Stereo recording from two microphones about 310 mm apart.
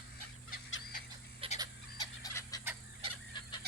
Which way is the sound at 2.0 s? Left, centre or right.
Centre.